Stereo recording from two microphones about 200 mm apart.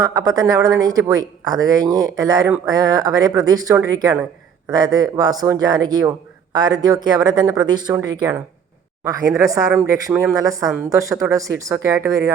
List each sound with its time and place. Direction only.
0.0 s a man's voice: 20° right (ahead or behind)